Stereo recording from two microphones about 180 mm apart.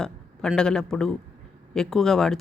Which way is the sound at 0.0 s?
5° left (ahead or behind).